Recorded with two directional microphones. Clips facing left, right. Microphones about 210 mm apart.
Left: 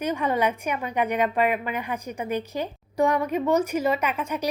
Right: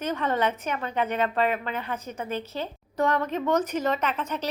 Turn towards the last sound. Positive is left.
turn(degrees=10)  # may be behind; listen again after turning